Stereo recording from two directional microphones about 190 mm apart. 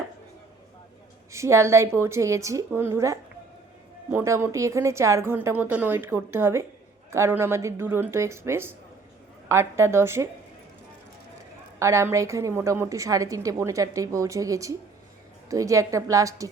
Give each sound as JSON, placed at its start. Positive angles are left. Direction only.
{"t": 1.3, "sound": "a woman's voice", "side_deg": -15}
{"t": 11.8, "sound": "a woman's voice", "side_deg": -15}